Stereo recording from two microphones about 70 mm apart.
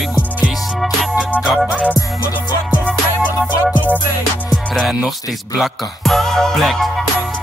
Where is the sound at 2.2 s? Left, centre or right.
Right.